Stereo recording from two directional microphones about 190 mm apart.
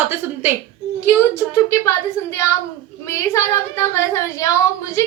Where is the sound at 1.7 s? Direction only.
15° left (ahead or behind).